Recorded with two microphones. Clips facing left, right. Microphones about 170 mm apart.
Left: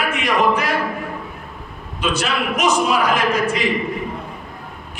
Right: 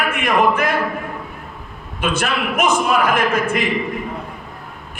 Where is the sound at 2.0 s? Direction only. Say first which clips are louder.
Right 1 dB; 55° right (ahead or behind).